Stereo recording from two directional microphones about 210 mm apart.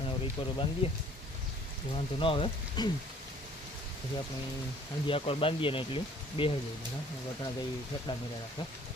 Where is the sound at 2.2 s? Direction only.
25° left (ahead or behind).